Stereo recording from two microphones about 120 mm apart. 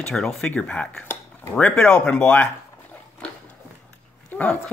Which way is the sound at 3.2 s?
10° left (ahead or behind).